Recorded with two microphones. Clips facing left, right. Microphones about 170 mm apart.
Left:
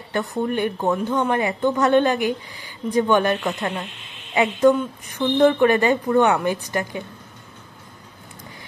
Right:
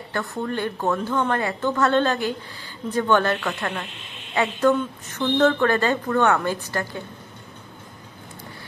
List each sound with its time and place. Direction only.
0.1 s a woman's voice: 20° left (ahead or behind)